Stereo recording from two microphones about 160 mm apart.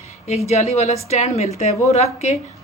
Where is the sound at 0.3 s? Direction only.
40° left (ahead or behind).